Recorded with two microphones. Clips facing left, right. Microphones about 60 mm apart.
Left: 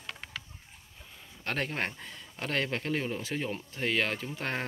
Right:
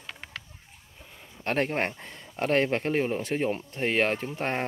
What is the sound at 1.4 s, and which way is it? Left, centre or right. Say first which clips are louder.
Speech: right 6 dB; right.